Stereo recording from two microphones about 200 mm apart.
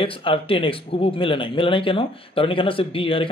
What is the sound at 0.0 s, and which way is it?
Speech, 25° left (ahead or behind).